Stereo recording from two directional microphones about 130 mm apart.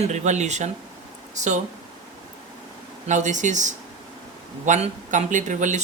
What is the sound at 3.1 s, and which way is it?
Speech, 70° right (ahead or behind).